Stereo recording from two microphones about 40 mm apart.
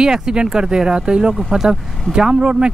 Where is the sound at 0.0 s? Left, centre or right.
Centre.